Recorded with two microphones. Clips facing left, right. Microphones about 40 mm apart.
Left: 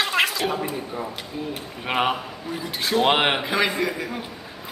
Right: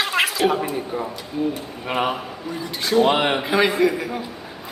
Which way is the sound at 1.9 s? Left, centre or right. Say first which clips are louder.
Even; centre.